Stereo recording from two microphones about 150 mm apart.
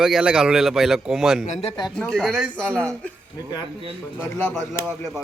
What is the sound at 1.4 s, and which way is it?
Speech, 55° left (ahead or behind).